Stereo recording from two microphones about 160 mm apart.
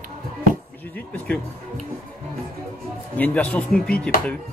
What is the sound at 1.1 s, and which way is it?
Speech, 10° left (ahead or behind).